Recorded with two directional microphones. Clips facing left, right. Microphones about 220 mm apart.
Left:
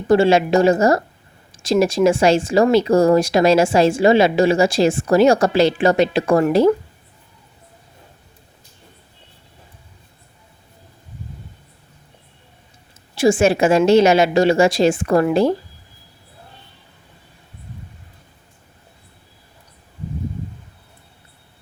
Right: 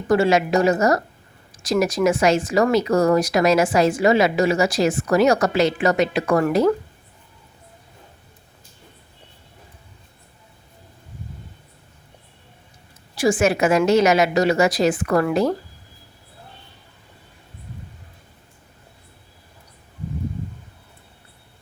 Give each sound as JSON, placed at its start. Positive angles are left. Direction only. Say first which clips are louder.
{"t": 0.1, "sound": "speech", "louder": "left 4 dB", "side_deg": 30}
{"t": 13.1, "sound": "speech", "louder": "left 4 dB", "side_deg": 25}